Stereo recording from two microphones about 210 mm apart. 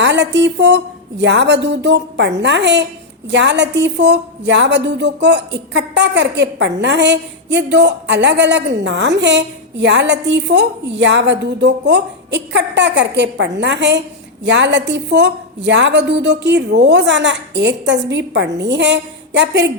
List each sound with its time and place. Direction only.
0.0 s speech: 55° right (ahead or behind)